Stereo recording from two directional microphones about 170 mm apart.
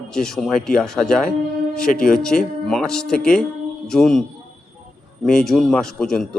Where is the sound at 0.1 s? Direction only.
5° left (ahead or behind).